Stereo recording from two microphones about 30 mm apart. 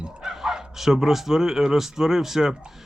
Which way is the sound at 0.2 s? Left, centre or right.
Centre.